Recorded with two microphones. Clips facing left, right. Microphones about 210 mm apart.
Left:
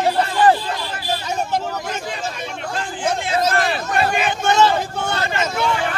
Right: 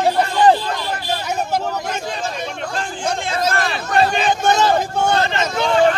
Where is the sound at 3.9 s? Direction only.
35° right (ahead or behind).